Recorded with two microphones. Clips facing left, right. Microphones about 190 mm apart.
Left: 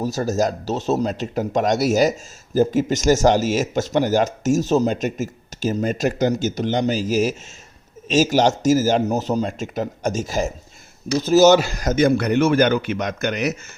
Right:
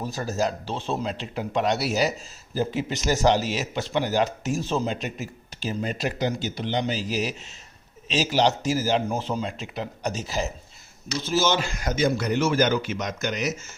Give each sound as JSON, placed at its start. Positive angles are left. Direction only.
{"t": 0.0, "sound": "speech", "side_deg": 40}
{"t": 11.9, "sound": "a man's voice", "side_deg": 60}